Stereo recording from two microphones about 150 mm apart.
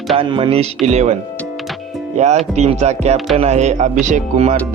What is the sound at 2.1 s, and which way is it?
Music, 50° right (ahead or behind).